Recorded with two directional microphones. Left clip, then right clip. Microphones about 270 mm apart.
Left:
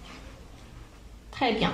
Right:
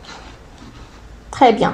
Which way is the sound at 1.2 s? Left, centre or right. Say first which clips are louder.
Right 14 dB; right.